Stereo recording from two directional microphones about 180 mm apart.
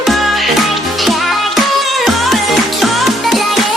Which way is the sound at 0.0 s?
Centre (ahead or behind).